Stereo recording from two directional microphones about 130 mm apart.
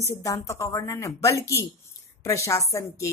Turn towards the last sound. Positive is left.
turn(degrees=25)  # may be behind; listen again after turning